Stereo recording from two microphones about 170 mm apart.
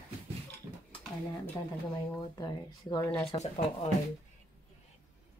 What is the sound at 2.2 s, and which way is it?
Speech, 25° left (ahead or behind).